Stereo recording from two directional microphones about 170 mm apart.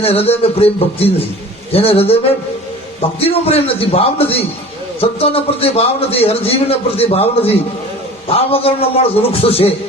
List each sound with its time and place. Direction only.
0.0 s a man's voice: 35° left (ahead or behind)
3.2 s a man's voice: 35° left (ahead or behind)